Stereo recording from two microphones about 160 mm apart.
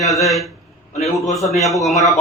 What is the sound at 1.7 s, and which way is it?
Speech, centre (ahead or behind).